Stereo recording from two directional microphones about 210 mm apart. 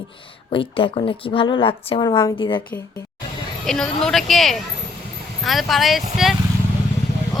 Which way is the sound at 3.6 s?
5° left (ahead or behind).